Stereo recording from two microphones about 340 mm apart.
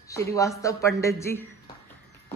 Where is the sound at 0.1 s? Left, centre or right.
Centre.